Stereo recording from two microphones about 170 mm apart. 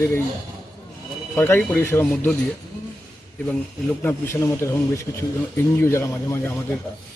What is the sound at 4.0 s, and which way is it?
Speech, 15° left (ahead or behind).